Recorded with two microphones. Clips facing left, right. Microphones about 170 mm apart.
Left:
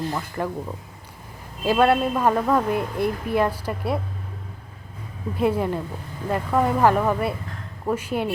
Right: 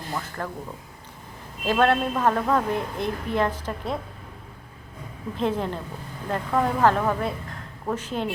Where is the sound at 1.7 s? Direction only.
10° left (ahead or behind).